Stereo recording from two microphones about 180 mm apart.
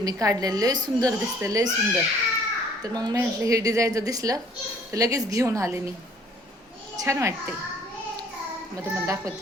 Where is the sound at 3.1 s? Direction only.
20° right (ahead or behind).